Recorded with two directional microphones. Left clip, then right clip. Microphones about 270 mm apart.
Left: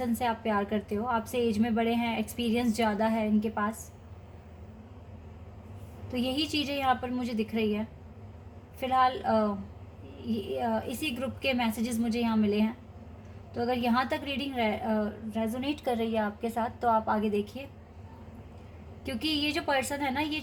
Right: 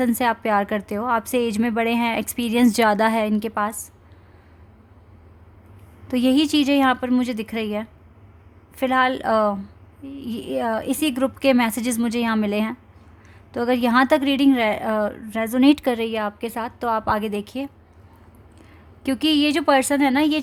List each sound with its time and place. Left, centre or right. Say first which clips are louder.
0.0 s a woman's voice: right 9 dB; right
6.3 s a woman's voice: right 13 dB; right
8.8 s a woman's voice: right 6 dB; right
10.6 s a woman's voice: right 10 dB; right
19.0 s a woman's voice: right 11 dB; right